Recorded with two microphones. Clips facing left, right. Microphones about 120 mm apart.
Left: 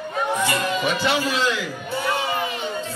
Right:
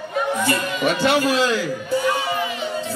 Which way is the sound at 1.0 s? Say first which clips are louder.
Right 7 dB; 45° right (ahead or behind).